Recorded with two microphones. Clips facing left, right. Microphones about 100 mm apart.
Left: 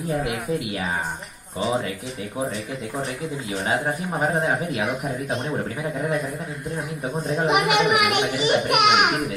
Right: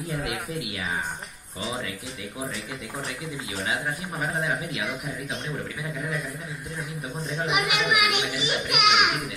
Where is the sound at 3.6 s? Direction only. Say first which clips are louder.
Left 5 dB; 40° left (ahead or behind).